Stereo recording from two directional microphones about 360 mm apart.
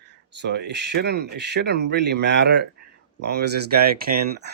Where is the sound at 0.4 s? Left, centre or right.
Right.